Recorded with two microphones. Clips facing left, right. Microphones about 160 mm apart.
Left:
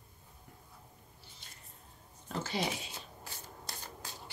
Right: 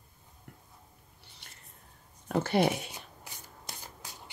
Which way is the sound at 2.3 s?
60° right (ahead or behind).